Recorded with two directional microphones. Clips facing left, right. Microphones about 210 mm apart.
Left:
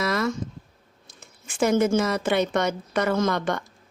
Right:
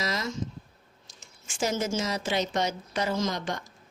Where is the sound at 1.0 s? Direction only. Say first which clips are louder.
Left 5 dB; 60° left (ahead or behind).